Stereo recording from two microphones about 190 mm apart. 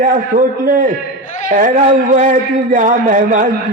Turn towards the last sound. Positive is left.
turn(degrees=-45)  # may be behind; listen again after turning